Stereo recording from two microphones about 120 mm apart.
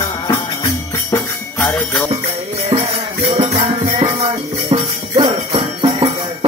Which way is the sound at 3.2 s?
55° right (ahead or behind).